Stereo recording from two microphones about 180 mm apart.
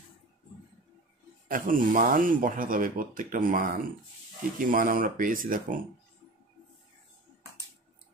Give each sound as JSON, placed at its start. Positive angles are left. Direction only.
{"t": 1.5, "sound": "speech", "side_deg": -50}